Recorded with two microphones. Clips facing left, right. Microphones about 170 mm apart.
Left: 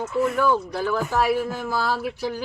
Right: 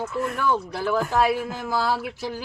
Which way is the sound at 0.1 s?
5° left (ahead or behind).